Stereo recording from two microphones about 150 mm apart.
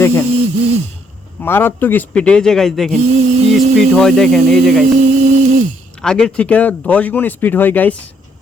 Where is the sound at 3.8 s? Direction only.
5° left (ahead or behind).